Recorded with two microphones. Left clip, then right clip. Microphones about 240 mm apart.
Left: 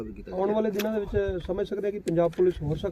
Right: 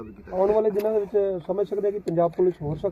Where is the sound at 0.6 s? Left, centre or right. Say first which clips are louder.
Right 5 dB; left.